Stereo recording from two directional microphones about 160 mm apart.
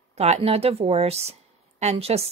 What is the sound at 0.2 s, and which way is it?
Speech, 40° right (ahead or behind).